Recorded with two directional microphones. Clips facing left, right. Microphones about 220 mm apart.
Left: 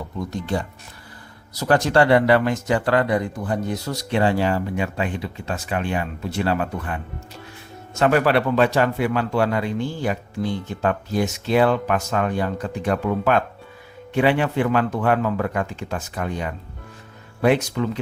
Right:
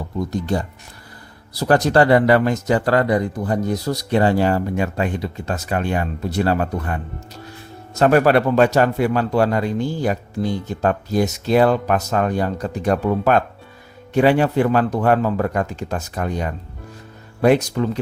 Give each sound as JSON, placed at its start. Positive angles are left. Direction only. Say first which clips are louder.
{"t": 0.3, "sound": "speech", "louder": "right 1 dB", "side_deg": -40}